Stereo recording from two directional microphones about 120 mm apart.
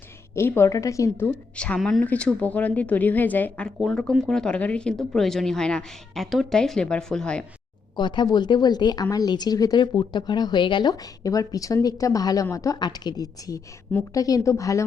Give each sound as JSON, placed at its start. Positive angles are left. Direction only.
{"t": 0.3, "sound": "a woman's voice", "side_deg": 20}
{"t": 1.5, "sound": "a woman's voice", "side_deg": 10}
{"t": 7.9, "sound": "a woman's voice", "side_deg": 40}